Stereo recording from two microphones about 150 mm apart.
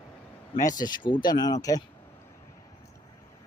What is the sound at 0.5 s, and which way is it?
Speech, 25° left (ahead or behind).